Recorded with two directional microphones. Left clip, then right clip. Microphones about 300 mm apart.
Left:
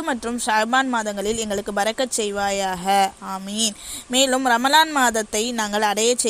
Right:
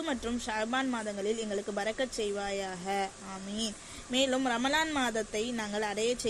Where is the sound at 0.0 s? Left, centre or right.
Left.